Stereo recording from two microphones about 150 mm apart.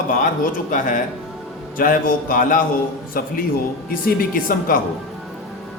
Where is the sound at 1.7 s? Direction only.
70° left (ahead or behind).